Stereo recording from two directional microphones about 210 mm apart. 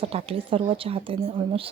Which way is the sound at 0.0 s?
25° right (ahead or behind).